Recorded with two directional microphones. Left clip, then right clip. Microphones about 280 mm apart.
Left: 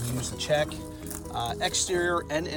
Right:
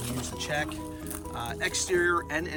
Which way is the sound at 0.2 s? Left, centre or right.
Centre.